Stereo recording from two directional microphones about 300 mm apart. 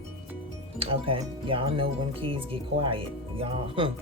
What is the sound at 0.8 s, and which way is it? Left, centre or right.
Speech, centre.